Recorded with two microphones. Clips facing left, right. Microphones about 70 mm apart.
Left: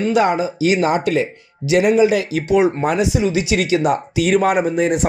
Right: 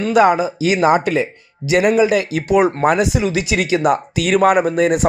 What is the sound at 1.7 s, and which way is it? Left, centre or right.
Speech, right.